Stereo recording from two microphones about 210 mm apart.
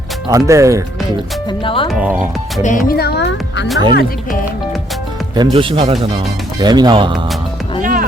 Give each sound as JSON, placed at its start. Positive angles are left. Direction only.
{"t": 0.3, "sound": "speech", "side_deg": -15}
{"t": 1.5, "sound": "speech", "side_deg": 25}
{"t": 1.9, "sound": "speech", "side_deg": -5}
{"t": 2.6, "sound": "speech", "side_deg": 45}
{"t": 5.3, "sound": "speech", "side_deg": -20}
{"t": 7.8, "sound": "music", "side_deg": -40}